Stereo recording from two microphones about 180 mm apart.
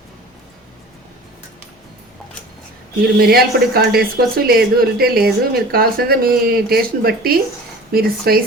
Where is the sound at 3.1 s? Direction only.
60° right (ahead or behind).